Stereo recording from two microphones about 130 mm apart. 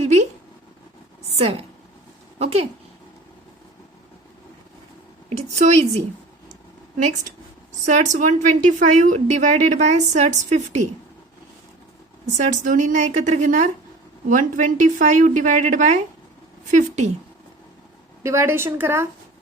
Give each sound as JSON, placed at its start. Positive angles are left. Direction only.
{"t": 0.0, "sound": "a sound", "side_deg": -60}
{"t": 1.4, "sound": "a woman's voice", "side_deg": -55}
{"t": 5.4, "sound": "a woman's voice", "side_deg": -60}
{"t": 7.9, "sound": "a woman's voice", "side_deg": -70}
{"t": 12.2, "sound": "a woman's voice", "side_deg": -65}
{"t": 14.3, "sound": "a woman's voice", "side_deg": -85}
{"t": 18.2, "sound": "a woman's voice", "side_deg": -20}